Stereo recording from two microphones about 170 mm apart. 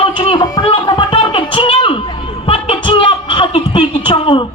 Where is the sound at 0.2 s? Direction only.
25° left (ahead or behind).